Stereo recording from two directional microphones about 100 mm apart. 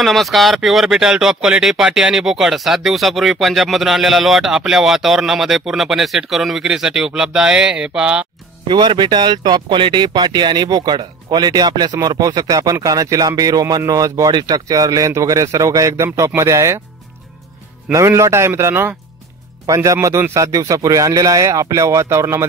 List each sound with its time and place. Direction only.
0.0 s speech: centre (ahead or behind)
8.6 s a man's voice: 50° right (ahead or behind); by 16.8 s 30° right (ahead or behind)
17.9 s a man's voice: 30° right (ahead or behind)